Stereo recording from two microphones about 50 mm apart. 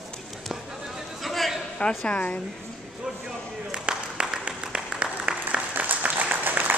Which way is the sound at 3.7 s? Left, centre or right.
Centre.